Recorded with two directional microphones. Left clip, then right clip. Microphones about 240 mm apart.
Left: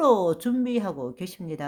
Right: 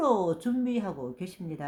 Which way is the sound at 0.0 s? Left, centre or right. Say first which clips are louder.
Left 5 dB; left.